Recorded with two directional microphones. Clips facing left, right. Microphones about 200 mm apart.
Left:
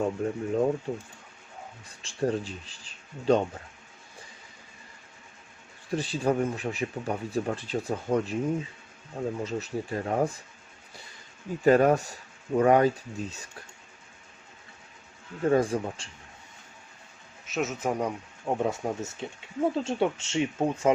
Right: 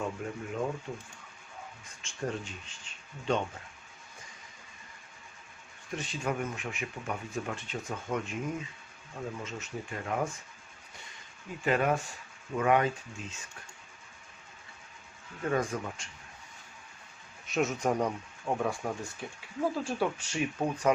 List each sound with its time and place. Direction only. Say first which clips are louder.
0.2 s speech: left 8 dB; 35° left (ahead or behind)
5.9 s speech: left 8 dB; 35° left (ahead or behind)
11.6 s speech: left 8 dB; 40° left (ahead or behind)
15.4 s speech: left 7 dB; 30° left (ahead or behind)
17.4 s speech: even; centre (ahead or behind)
18.4 s speech: left 4 dB; 20° left (ahead or behind)